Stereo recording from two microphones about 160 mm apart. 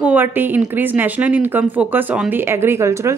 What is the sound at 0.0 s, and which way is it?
Speech, 10° right (ahead or behind).